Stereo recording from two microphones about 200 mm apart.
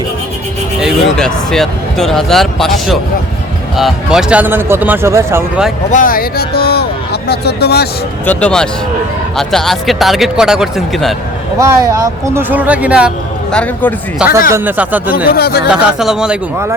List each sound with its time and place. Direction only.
0.8 s speech: centre (ahead or behind)
5.9 s speech: 45° left (ahead or behind)
8.3 s speech: 5° left (ahead or behind)
11.5 s speech: 15° right (ahead or behind)
15.3 s speech: 50° left (ahead or behind)
15.7 s speech: 5° right (ahead or behind)